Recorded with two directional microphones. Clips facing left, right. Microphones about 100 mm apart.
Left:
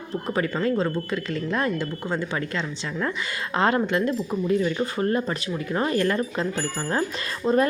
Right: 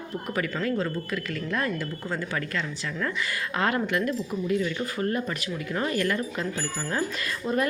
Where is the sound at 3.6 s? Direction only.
30° left (ahead or behind).